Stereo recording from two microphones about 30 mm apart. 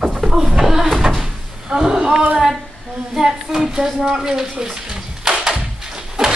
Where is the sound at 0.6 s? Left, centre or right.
Centre.